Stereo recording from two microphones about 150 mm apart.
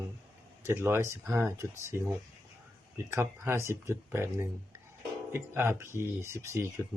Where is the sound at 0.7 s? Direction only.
15° right (ahead or behind).